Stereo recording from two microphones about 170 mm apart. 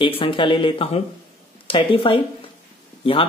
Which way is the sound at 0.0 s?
30° left (ahead or behind).